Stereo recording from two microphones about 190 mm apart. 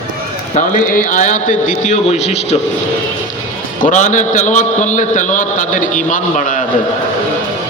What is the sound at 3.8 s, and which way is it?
A man's voice, 40° left (ahead or behind).